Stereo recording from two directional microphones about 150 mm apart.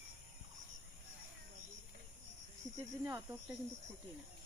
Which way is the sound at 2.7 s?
20° right (ahead or behind).